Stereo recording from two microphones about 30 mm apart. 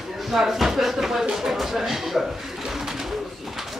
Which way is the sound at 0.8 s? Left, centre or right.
Centre.